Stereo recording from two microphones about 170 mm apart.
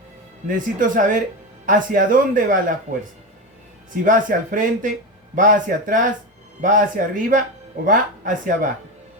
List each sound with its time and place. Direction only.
0.4 s speech: 50° right (ahead or behind)
4.0 s speech: 50° right (ahead or behind)